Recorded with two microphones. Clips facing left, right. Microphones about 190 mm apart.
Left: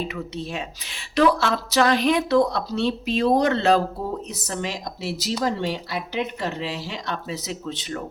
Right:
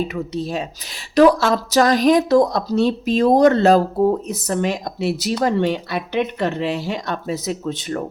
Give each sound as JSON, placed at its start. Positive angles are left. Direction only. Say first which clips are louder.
{"t": 0.1, "sound": "a woman's voice", "louder": "right 6 dB", "side_deg": -40}